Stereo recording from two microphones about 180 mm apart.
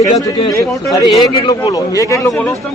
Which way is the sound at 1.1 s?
30° left (ahead or behind).